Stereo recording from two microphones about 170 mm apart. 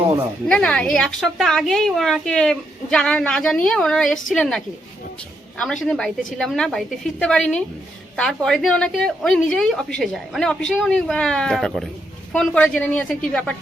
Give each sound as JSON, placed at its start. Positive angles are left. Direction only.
{"t": 0.4, "sound": "a woman's voice", "side_deg": 5}